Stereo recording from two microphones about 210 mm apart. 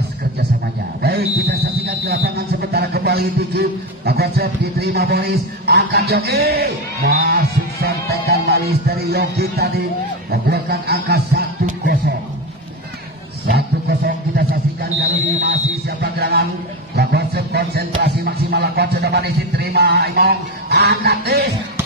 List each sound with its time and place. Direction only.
1.0 s speech: 45° right (ahead or behind)
13.5 s a sound: 45° right (ahead or behind)
16.0 s speech: 45° right (ahead or behind)